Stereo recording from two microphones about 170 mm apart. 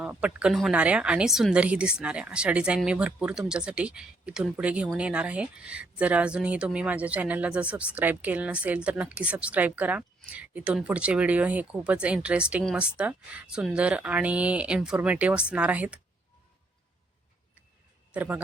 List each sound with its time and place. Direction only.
0.0 s speech: 5° right (ahead or behind)
18.1 s a man's voice: 10° right (ahead or behind)